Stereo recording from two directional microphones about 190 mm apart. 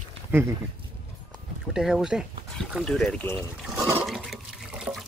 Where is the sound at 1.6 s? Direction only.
5° right (ahead or behind).